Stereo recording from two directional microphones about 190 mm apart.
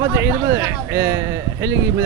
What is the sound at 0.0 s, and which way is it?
Speech, 15° right (ahead or behind).